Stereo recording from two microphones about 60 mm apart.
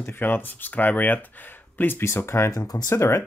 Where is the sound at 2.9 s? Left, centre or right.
Left.